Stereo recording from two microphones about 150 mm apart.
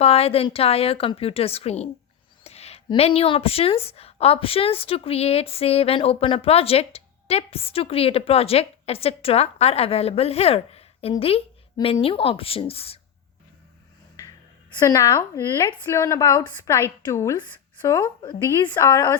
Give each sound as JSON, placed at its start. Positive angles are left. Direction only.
{"t": 0.0, "sound": "speech", "side_deg": 40}
{"t": 14.8, "sound": "a woman's voice", "side_deg": 20}
{"t": 18.8, "sound": "a woman's voice", "side_deg": 20}